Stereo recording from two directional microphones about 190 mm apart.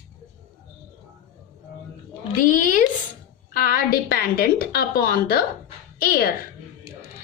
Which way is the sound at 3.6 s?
50° left (ahead or behind).